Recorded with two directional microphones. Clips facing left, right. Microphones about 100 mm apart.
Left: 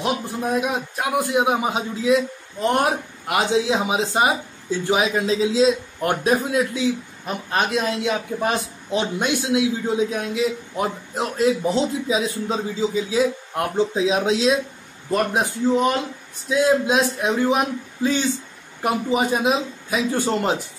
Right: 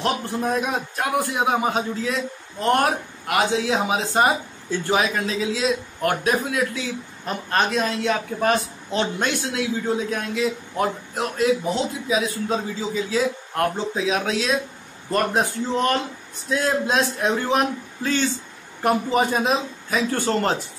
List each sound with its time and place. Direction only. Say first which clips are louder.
0.0 s speech: even; 5° left (ahead or behind); by 6.8 s 25° left (ahead or behind)
7.2 s speech: even; 5° left (ahead or behind); by 14.5 s 25° left (ahead or behind)
15.0 s speech: even; 10° left (ahead or behind)